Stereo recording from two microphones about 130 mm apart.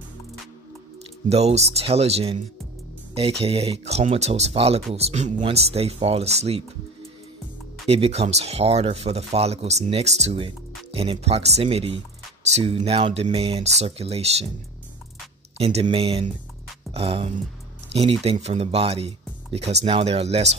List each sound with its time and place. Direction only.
1.3 s speech: 55° right (ahead or behind)
7.8 s speech: 50° right (ahead or behind)
12.4 s speech: 55° right (ahead or behind)
12.7 s speech: 45° right (ahead or behind)
15.5 s speech: 50° right (ahead or behind)